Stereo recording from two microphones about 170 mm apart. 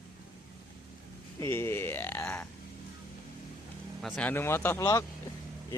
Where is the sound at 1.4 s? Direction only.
15° left (ahead or behind).